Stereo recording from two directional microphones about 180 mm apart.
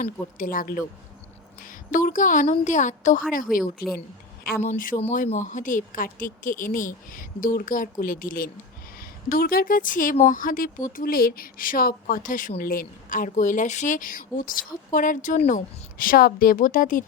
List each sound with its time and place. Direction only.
0.0 s speech: 50° left (ahead or behind)
4.4 s speech: 55° left (ahead or behind)
4.7 s speech: 45° left (ahead or behind)